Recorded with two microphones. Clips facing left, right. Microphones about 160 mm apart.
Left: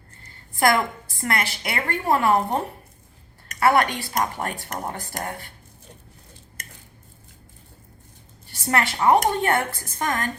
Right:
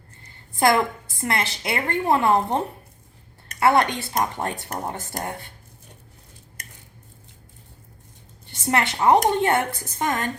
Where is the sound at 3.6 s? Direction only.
20° right (ahead or behind).